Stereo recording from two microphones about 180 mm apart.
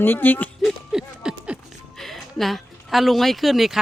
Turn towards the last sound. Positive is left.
turn(degrees=0)  # may be behind; listen again after turning